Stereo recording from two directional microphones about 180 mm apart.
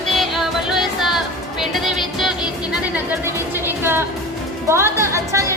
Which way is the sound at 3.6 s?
15° right (ahead or behind).